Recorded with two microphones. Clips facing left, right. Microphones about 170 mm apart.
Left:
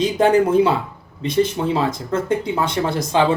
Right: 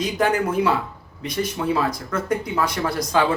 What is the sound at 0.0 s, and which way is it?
Speech, 30° left (ahead or behind).